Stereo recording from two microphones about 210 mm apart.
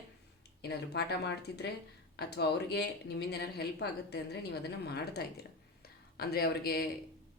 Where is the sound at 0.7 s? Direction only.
50° left (ahead or behind).